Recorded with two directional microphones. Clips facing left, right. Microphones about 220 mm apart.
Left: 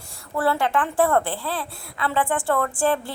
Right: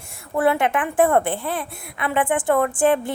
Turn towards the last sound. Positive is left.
turn(degrees=-20)  # may be behind; listen again after turning